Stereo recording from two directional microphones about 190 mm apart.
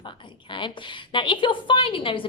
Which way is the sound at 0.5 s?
25° left (ahead or behind).